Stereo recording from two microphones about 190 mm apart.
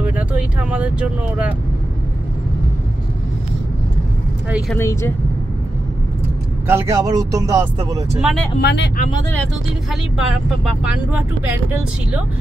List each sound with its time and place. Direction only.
0.0 s speech: 10° right (ahead or behind)
4.5 s speech: 5° right (ahead or behind)
4.7 s speech: 15° left (ahead or behind)
6.7 s speech: 15° right (ahead or behind)
8.2 s speech: centre (ahead or behind)
8.5 s speech: 60° left (ahead or behind)
10.6 s speech: 5° right (ahead or behind)